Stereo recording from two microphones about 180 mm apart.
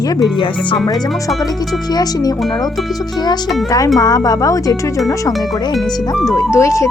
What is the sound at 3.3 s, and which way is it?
Speech, 20° left (ahead or behind).